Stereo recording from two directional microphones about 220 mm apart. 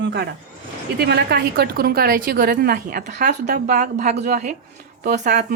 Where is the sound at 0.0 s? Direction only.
50° right (ahead or behind).